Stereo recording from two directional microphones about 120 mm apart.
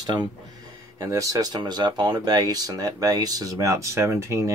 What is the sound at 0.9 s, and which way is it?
Speech, 25° right (ahead or behind).